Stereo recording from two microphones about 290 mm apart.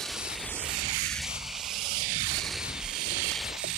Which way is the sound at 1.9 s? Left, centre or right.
Right.